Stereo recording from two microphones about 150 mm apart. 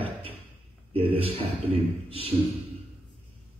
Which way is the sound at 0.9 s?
40° right (ahead or behind).